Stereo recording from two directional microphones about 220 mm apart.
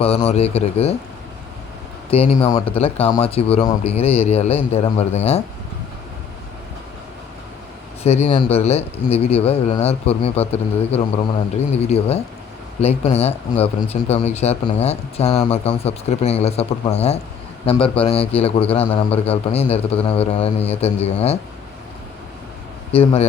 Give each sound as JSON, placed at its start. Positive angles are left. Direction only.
{"t": 0.0, "sound": "a man's voice", "side_deg": 25}
{"t": 2.0, "sound": "a man's voice", "side_deg": 25}
{"t": 8.0, "sound": "a man's voice", "side_deg": 30}
{"t": 11.8, "sound": "a man's voice", "side_deg": 30}
{"t": 22.9, "sound": "a man's voice", "side_deg": 25}